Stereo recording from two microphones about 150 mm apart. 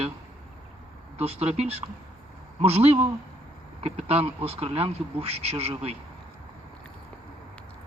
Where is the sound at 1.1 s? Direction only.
45° right (ahead or behind).